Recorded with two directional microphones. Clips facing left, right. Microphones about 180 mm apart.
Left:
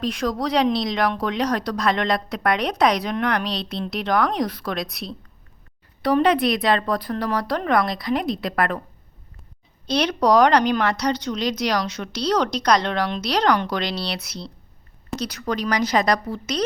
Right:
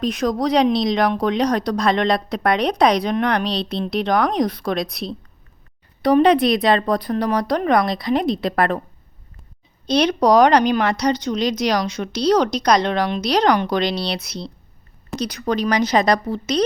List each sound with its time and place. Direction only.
0.0 s speech: 15° right (ahead or behind)
9.8 s a woman's voice: 15° right (ahead or behind)